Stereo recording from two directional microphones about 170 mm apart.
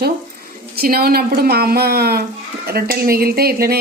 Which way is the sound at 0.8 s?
60° right (ahead or behind).